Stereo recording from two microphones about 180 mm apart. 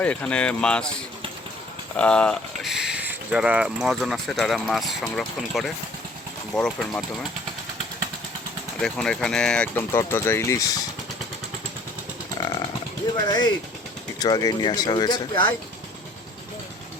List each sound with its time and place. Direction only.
0.0 s speech: 5° left (ahead or behind)
2.0 s speech: 5° left (ahead or behind)
8.8 s speech: 5° left (ahead or behind)
12.4 s sheep: 25° left (ahead or behind)
13.2 s speech: 20° left (ahead or behind)